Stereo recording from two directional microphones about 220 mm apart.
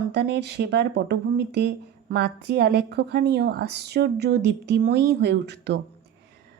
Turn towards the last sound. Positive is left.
turn(degrees=-50)  # may be behind; listen again after turning